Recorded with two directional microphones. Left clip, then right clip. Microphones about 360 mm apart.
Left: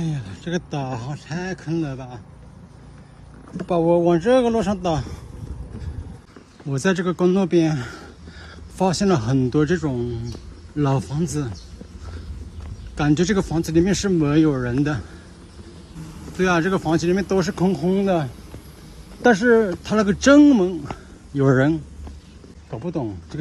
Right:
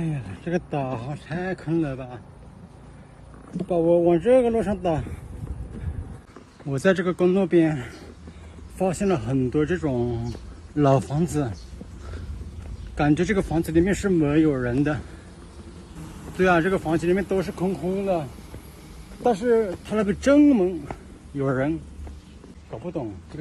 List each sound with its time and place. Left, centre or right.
0.0 s a man's voice: centre
3.6 s speech: centre
6.7 s a man's voice: centre
12.9 s a man's voice: centre
16.3 s speech: centre
19.2 s a man's voice: centre